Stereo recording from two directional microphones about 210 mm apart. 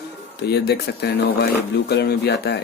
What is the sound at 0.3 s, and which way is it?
Speech, 50° left (ahead or behind).